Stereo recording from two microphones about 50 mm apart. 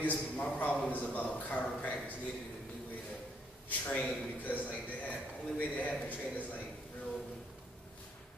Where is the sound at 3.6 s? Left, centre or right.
Left.